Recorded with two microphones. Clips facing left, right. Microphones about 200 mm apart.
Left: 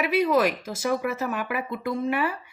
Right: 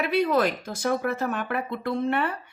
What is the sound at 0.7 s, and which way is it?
Speech, 35° right (ahead or behind).